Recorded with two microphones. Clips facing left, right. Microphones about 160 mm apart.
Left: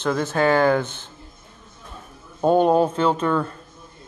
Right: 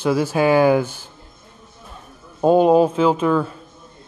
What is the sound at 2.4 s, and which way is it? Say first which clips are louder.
Speech: right 3 dB; 5° right (ahead or behind).